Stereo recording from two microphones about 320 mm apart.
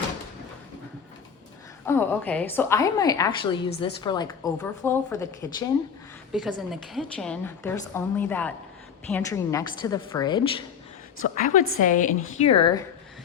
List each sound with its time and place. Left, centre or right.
1.9 s a woman's voice: centre
11.2 s a woman's voice: left